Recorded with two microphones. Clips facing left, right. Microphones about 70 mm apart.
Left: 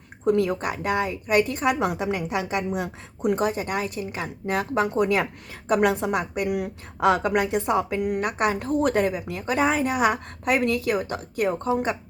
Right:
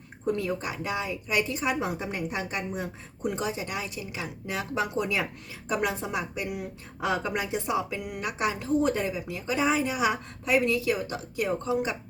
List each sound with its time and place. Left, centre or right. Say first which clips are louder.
0.3 s a woman's voice: left 7 dB; left
3.3 s a woman's voice: left 7 dB; left